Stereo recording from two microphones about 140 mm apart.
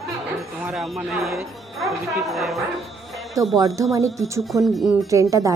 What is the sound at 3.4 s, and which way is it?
Speech, 25° right (ahead or behind).